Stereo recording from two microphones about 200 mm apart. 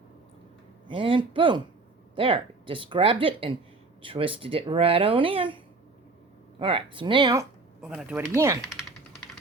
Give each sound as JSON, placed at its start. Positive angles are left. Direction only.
{"t": 0.9, "sound": "speech", "side_deg": -25}
{"t": 6.6, "sound": "speech", "side_deg": -25}
{"t": 7.8, "sound": "speech", "side_deg": -5}